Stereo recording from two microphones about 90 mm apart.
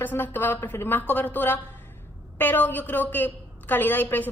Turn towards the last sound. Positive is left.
turn(degrees=20)  # may be behind; listen again after turning